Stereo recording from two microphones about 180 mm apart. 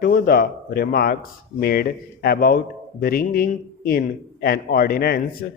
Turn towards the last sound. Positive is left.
turn(degrees=55)  # may be behind; listen again after turning